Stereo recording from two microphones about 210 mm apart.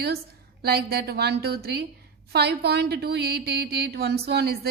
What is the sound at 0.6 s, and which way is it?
A woman's voice, 50° right (ahead or behind).